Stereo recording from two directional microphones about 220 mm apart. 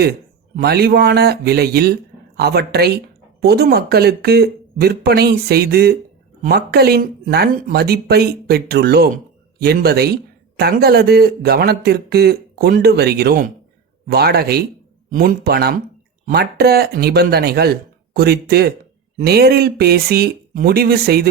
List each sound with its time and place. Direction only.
0.0 s a man's voice: 45° right (ahead or behind)